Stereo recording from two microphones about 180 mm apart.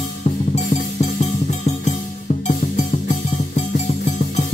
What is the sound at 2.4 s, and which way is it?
Music, 40° left (ahead or behind).